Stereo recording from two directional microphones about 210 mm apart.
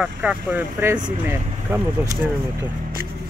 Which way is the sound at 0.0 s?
5° right (ahead or behind).